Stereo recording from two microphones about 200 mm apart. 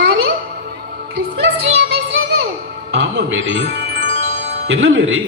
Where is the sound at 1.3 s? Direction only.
55° right (ahead or behind).